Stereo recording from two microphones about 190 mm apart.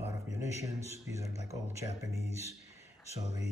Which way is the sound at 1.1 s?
15° right (ahead or behind).